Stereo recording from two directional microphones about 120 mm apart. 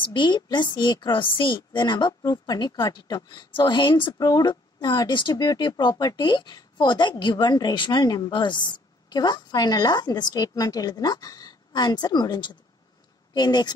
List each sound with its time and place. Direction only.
0.0 s a woman's voice: 40° left (ahead or behind)